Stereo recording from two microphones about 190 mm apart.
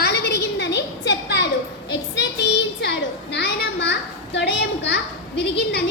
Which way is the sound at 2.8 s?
65° left (ahead or behind).